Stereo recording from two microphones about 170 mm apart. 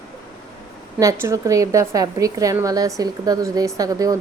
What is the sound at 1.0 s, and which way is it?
Speech, 15° right (ahead or behind).